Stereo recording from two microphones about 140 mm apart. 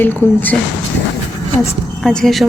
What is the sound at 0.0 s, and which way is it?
Speech, 15° left (ahead or behind).